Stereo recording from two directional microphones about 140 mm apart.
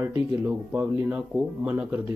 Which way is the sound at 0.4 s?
15° right (ahead or behind).